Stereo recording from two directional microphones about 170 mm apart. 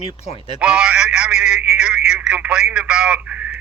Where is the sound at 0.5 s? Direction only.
5° right (ahead or behind).